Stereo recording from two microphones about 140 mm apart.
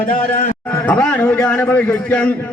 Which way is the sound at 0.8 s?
10° left (ahead or behind).